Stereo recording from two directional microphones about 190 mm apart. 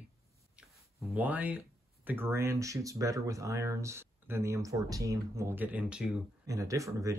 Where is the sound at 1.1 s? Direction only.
10° right (ahead or behind).